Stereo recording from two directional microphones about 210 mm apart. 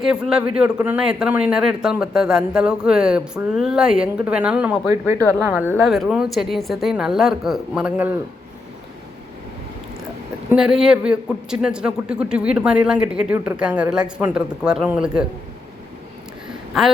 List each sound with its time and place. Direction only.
0.0 s speech: 5° right (ahead or behind)
4.9 s speech: 15° right (ahead or behind)
5.7 s speech: centre (ahead or behind)
10.5 s speech: 5° right (ahead or behind)
16.7 s speech: centre (ahead or behind)